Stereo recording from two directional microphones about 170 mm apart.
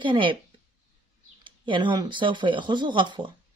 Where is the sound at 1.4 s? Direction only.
30° right (ahead or behind).